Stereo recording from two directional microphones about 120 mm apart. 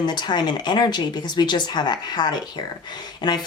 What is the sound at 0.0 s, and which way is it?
Speech, 35° left (ahead or behind).